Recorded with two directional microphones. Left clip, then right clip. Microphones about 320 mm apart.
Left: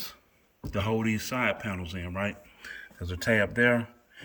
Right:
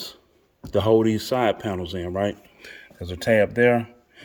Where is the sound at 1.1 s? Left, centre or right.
Left.